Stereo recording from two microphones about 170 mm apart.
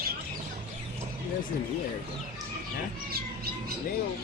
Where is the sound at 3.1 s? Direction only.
65° right (ahead or behind).